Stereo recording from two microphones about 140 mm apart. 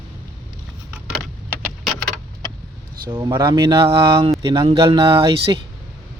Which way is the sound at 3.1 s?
30° right (ahead or behind).